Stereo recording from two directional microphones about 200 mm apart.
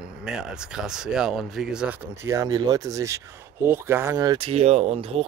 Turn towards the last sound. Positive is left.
turn(degrees=-30)  # may be behind; listen again after turning